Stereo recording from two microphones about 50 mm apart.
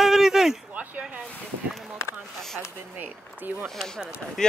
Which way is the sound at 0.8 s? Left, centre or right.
Right.